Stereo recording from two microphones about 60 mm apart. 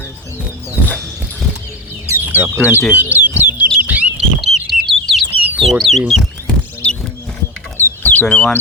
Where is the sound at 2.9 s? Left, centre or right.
Right.